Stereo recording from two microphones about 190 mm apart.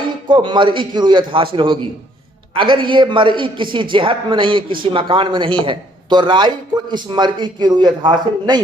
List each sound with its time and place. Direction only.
0.3 s a man's voice: 25° right (ahead or behind)